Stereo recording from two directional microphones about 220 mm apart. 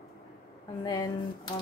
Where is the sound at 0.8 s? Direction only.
20° left (ahead or behind).